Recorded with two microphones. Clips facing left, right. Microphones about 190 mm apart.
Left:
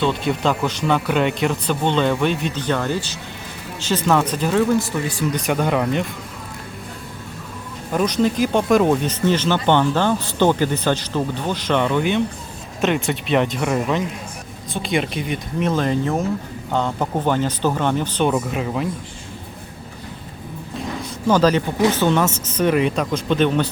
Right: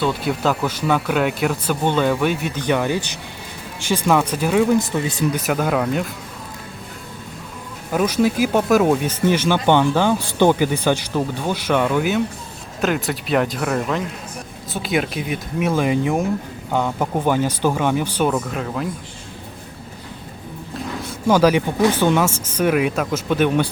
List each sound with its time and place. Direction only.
0.0 s speech: 5° right (ahead or behind)
5.3 s speech: 5° right (ahead or behind)
7.9 s speech: 5° right (ahead or behind)
18.3 s speech: 5° left (ahead or behind)
21.2 s speech: 10° right (ahead or behind)